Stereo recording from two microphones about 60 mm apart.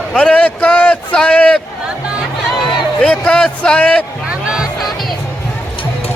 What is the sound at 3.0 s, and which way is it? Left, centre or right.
A man's voice, left.